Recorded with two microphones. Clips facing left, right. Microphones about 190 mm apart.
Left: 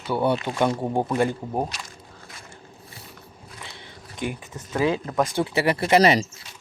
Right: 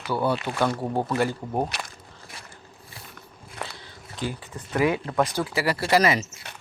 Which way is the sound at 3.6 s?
65° right (ahead or behind).